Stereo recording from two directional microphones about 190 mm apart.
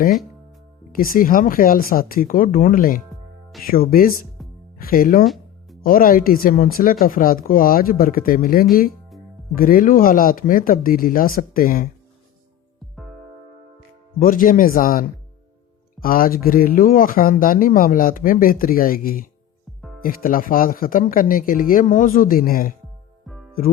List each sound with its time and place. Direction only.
0.9 s speech: 50° left (ahead or behind)
5.2 s music: centre (ahead or behind)
5.8 s speech: 50° left (ahead or behind)
14.2 s speech: 45° left (ahead or behind)
23.2 s music: centre (ahead or behind)